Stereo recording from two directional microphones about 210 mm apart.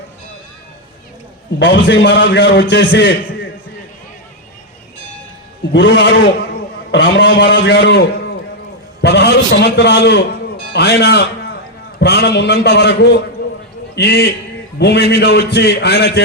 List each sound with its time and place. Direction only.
1.5 s a man's voice: 55° left (ahead or behind)
5.7 s a man's voice: 55° left (ahead or behind)